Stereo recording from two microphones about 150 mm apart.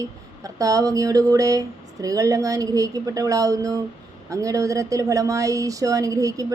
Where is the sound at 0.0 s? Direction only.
25° right (ahead or behind).